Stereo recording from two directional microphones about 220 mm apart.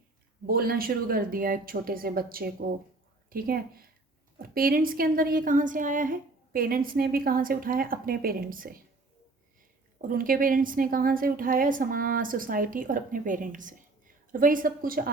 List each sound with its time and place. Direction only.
0.4 s a woman's voice: 45° right (ahead or behind)
10.1 s a woman's voice: 40° right (ahead or behind)